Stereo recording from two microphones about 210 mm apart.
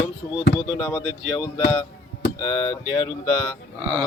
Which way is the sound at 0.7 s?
15° left (ahead or behind).